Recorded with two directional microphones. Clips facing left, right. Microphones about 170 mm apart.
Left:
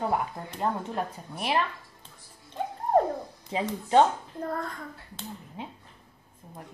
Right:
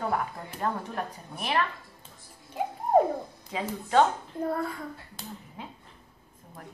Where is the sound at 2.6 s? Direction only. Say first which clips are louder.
Right 2 dB; 5° right (ahead or behind).